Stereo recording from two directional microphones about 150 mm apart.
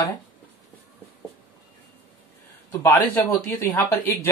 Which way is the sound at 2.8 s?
15° left (ahead or behind).